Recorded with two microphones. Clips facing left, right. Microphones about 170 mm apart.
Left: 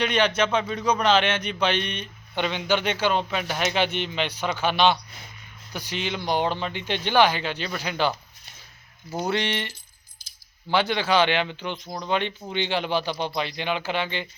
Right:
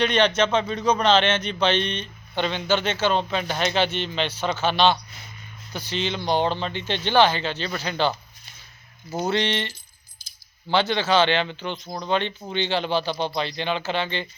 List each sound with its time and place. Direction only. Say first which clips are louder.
0.0 s speech: right 2 dB; 10° left (ahead or behind)
9.3 s speech: right 3 dB; 15° left (ahead or behind)
10.2 s a sound: right 1 dB; 65° left (ahead or behind)
10.7 s speech: right 1 dB; 10° left (ahead or behind)